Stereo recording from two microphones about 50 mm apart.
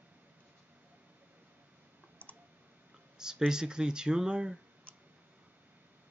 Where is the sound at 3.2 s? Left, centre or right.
Centre.